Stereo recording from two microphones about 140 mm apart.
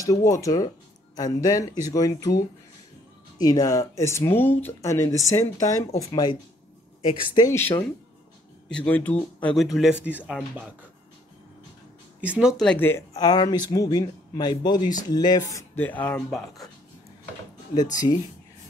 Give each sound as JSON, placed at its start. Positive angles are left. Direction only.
{"t": 0.0, "sound": "speech", "side_deg": 25}
{"t": 7.5, "sound": "speech", "side_deg": 15}
{"t": 12.2, "sound": "speech", "side_deg": -10}
{"t": 12.6, "sound": "speech", "side_deg": 15}
{"t": 13.1, "sound": "speech", "side_deg": 25}